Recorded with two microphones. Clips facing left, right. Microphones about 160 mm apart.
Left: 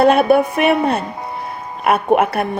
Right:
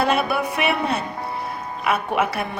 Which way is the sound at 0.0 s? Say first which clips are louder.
Left 9 dB; 55° left (ahead or behind).